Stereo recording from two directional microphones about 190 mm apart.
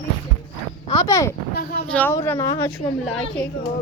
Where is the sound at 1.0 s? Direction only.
15° left (ahead or behind).